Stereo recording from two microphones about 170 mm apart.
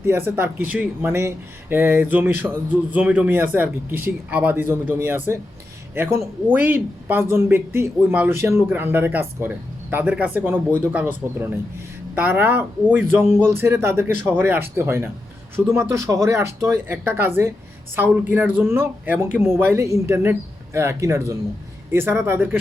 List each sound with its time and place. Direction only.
0.0 s speech: 15° right (ahead or behind)